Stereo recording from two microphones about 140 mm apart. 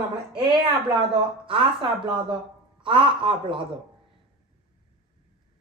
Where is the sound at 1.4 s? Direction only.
40° right (ahead or behind).